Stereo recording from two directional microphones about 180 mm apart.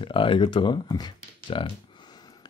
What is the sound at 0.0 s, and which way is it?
Speech, 30° left (ahead or behind).